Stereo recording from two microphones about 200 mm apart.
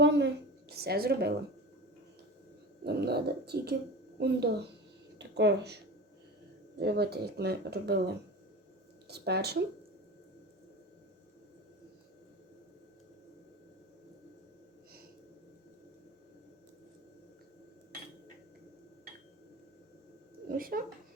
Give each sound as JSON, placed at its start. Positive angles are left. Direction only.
{"t": 0.0, "sound": "a sound", "side_deg": -60}
{"t": 2.8, "sound": "speech", "side_deg": -55}
{"t": 20.5, "sound": "speech", "side_deg": -45}